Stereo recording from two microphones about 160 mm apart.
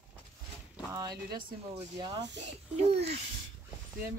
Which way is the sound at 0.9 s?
25° right (ahead or behind).